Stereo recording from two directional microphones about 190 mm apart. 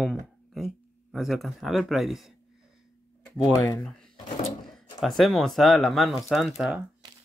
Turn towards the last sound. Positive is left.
turn(degrees=0)  # may be behind; listen again after turning